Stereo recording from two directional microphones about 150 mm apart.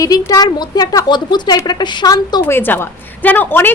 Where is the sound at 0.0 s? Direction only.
25° left (ahead or behind).